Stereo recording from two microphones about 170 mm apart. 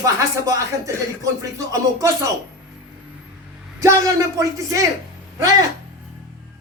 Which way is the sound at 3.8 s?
20° right (ahead or behind).